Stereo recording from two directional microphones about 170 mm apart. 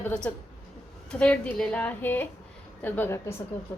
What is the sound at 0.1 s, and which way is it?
A woman's voice, 5° left (ahead or behind).